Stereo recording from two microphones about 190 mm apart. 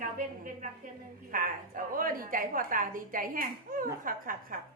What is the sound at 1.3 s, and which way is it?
A woman's voice, 45° right (ahead or behind).